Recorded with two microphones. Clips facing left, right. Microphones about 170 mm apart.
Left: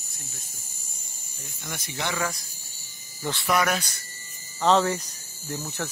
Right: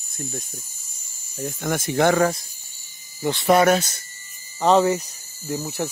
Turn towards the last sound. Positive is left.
turn(degrees=-10)  # may be behind; listen again after turning